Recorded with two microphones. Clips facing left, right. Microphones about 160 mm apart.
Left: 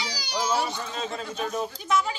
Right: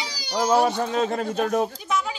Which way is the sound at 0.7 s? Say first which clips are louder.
Right 9 dB; 60° right (ahead or behind).